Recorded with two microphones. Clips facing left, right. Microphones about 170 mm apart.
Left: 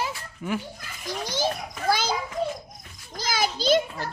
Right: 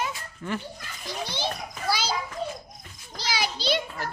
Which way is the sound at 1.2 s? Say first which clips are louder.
Left 6 dB; 45° left (ahead or behind).